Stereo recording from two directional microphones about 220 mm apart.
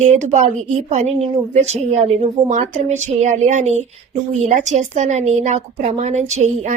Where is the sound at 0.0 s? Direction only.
30° right (ahead or behind).